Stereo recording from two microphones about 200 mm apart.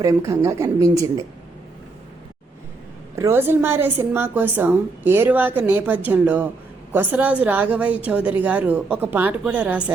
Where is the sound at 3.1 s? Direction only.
15° right (ahead or behind).